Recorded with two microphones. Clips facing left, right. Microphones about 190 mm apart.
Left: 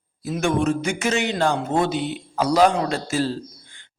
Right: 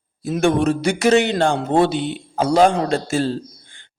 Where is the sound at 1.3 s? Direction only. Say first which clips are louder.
Right 4 dB; 30° right (ahead or behind).